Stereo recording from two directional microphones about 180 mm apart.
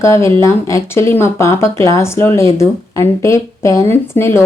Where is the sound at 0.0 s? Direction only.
15° left (ahead or behind).